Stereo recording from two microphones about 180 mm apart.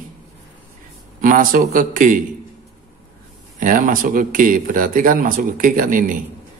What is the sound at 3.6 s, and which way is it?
Speech, 50° right (ahead or behind).